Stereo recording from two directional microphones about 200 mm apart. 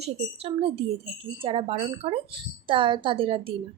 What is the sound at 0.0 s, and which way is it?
A woman's voice, 30° right (ahead or behind).